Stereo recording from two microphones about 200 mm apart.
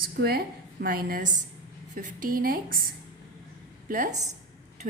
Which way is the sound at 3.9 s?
40° right (ahead or behind).